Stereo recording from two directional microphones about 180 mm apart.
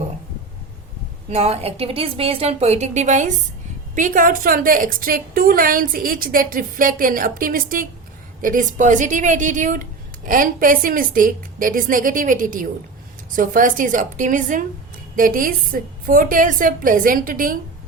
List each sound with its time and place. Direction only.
1.3 s a woman's voice: 35° right (ahead or behind)